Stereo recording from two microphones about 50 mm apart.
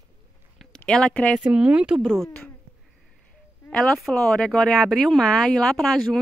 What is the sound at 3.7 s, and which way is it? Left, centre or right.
Speech, centre.